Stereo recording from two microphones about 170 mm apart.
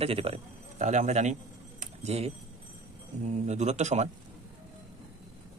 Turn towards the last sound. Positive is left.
turn(degrees=-40)  # may be behind; listen again after turning